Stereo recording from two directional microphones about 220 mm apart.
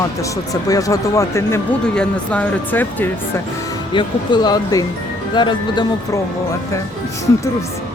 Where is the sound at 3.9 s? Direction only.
20° left (ahead or behind).